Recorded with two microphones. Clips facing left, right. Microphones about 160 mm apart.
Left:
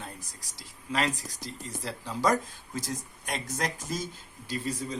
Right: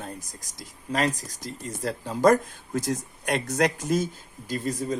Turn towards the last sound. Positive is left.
turn(degrees=-50)  # may be behind; listen again after turning